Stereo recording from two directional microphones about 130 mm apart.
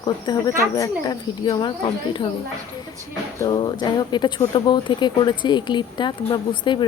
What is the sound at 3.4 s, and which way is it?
Speech, 35° left (ahead or behind).